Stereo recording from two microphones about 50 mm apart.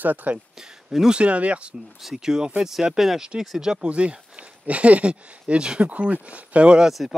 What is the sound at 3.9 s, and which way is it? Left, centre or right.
Speech, right.